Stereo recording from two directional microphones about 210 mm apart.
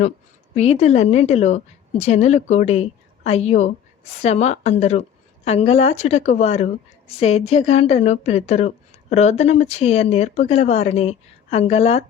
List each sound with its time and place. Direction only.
0.5 s speech: 30° left (ahead or behind)